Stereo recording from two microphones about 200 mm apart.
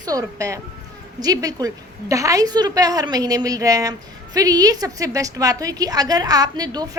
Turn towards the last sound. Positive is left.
turn(degrees=-20)  # may be behind; listen again after turning